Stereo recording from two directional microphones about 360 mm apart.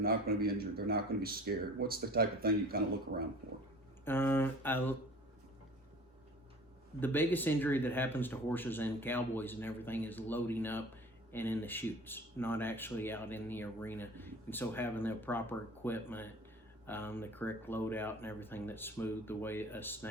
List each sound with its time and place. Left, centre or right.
0.0 s speech: right
4.0 s speech: centre
7.0 s speech: centre